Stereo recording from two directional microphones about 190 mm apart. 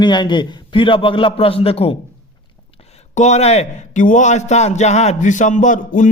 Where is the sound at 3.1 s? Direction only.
35° left (ahead or behind).